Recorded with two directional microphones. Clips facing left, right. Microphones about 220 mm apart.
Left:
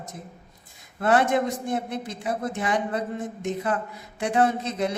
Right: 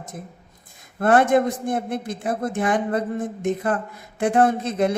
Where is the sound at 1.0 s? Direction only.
50° right (ahead or behind).